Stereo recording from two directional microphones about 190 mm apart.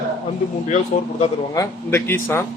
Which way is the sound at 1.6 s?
10° left (ahead or behind).